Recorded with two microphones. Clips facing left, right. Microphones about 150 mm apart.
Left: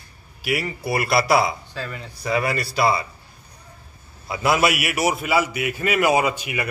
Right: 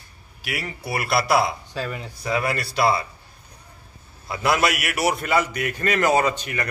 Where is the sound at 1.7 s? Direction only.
20° right (ahead or behind).